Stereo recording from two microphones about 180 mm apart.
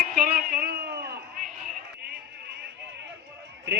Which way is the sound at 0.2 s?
55° right (ahead or behind).